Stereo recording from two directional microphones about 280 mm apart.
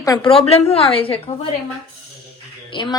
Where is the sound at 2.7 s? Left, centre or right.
Centre.